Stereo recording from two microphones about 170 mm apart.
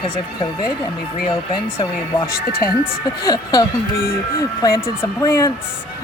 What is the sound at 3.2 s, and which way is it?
Speech, 25° left (ahead or behind).